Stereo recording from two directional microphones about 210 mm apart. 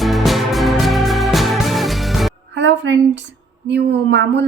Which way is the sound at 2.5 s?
60° right (ahead or behind).